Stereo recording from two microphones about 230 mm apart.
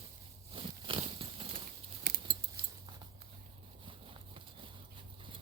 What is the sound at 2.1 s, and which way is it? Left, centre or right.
Keys jangling, right.